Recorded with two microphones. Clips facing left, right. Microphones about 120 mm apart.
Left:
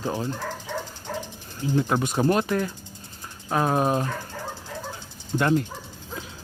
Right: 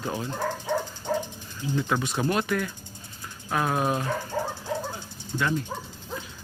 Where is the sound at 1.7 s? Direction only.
40° left (ahead or behind).